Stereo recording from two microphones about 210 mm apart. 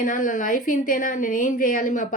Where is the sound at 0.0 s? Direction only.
40° left (ahead or behind).